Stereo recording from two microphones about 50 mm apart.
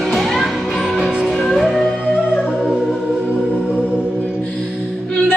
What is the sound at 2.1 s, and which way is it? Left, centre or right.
Music, centre.